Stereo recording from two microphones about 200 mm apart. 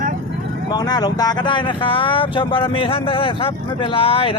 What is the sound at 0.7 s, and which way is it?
Speech, 20° left (ahead or behind).